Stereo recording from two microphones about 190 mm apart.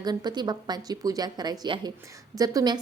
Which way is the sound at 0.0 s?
20° right (ahead or behind).